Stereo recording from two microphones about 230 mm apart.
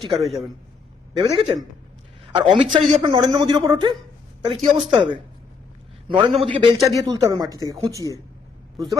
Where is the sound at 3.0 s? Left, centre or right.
Centre.